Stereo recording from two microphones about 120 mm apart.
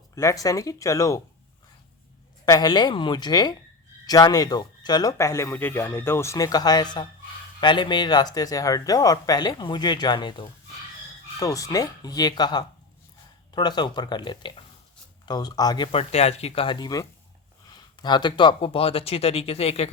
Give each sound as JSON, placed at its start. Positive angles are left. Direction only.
{"t": 0.2, "sound": "speech", "side_deg": 30}
{"t": 2.5, "sound": "speech", "side_deg": 35}
{"t": 5.1, "sound": "speech", "side_deg": 25}
{"t": 11.3, "sound": "speech", "side_deg": 30}
{"t": 15.9, "sound": "speech", "side_deg": 60}
{"t": 16.6, "sound": "speech", "side_deg": 35}